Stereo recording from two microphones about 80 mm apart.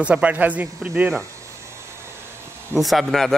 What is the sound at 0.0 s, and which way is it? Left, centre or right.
Speech, centre.